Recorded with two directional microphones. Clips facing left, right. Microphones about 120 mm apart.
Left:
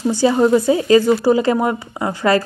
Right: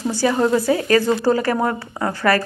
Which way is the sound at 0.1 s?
20° left (ahead or behind).